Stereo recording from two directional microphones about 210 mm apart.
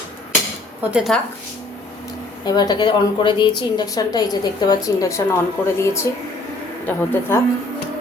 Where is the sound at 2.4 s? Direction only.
20° left (ahead or behind).